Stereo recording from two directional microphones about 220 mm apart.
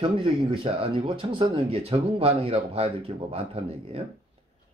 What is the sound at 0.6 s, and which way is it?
Speech, 25° right (ahead or behind).